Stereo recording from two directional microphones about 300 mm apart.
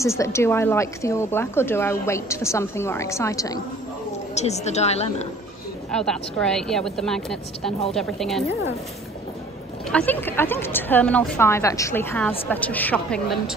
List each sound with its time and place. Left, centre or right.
0.0 s a woman's voice: centre
4.4 s a woman's voice: left
5.9 s speech: centre
9.8 s a woman's voice: centre